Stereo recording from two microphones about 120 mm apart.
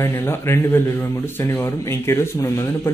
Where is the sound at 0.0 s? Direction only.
20° left (ahead or behind).